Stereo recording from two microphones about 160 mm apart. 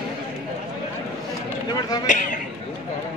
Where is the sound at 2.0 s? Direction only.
50° left (ahead or behind).